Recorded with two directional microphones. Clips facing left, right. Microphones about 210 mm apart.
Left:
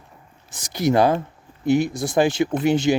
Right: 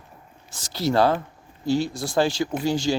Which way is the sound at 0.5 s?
15° left (ahead or behind).